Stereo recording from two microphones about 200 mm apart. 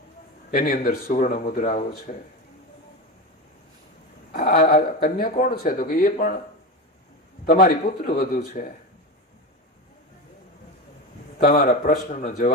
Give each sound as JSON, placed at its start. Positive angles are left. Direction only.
{"t": 0.5, "sound": "speech", "side_deg": 45}
{"t": 4.3, "sound": "speech", "side_deg": 45}
{"t": 7.4, "sound": "speech", "side_deg": 45}
{"t": 11.4, "sound": "speech", "side_deg": 45}